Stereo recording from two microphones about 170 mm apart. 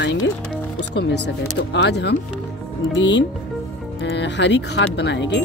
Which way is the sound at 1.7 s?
85° left.